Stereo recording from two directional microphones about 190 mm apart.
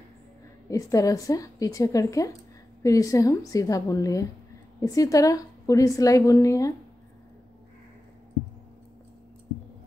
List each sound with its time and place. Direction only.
0.7 s a woman's voice: 15° left (ahead or behind)